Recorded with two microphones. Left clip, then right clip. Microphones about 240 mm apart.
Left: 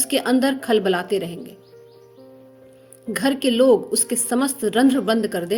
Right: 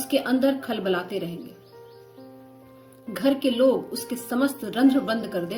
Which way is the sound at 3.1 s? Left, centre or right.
Left.